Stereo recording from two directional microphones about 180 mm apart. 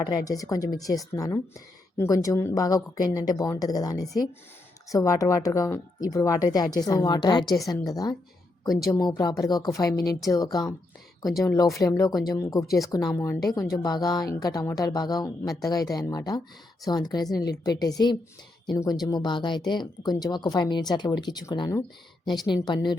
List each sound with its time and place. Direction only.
0.0 s speech: 20° left (ahead or behind)
8.9 s speech: 20° left (ahead or behind)
12.6 s speech: centre (ahead or behind)
12.9 s speech: 20° left (ahead or behind)